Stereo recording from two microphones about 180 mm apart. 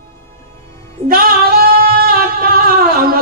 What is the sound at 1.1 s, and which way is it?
Singing, 55° right (ahead or behind).